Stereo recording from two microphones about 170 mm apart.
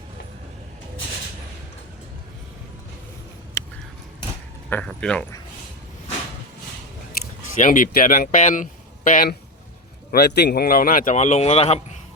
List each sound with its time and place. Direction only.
3.6 s a sound: 15° left (ahead or behind)
4.7 s speech: 5° left (ahead or behind)
7.5 s speech: 50° left (ahead or behind)
10.1 s speech: 70° left (ahead or behind); by 11.8 s 40° left (ahead or behind)